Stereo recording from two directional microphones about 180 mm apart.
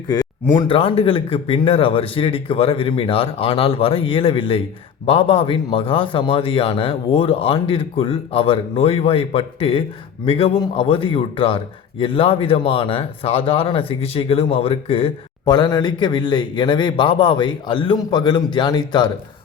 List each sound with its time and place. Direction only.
0.1 s a man's voice: 20° left (ahead or behind)